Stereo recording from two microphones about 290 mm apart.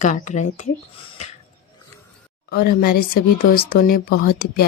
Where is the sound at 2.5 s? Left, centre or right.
Left.